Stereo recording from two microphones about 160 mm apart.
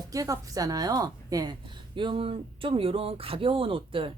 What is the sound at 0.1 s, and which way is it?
A woman's voice, 20° right (ahead or behind).